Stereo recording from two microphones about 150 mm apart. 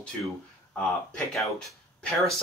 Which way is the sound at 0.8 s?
5° left (ahead or behind).